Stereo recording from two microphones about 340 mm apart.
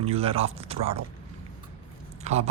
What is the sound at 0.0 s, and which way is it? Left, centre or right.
Speech, centre.